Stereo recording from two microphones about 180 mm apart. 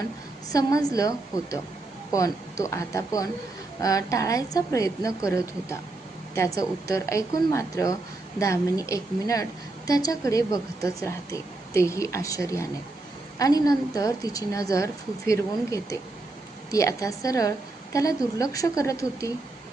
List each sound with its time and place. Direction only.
0.5 s a woman's voice: 20° left (ahead or behind)